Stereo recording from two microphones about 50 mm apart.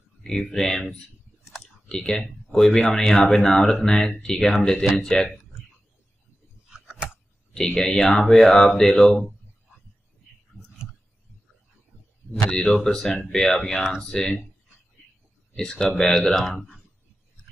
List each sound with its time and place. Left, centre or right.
0.2 s speech: centre
1.4 s clicking: centre
1.9 s speech: centre
7.5 s speech: centre
12.3 s speech: centre
15.5 s speech: centre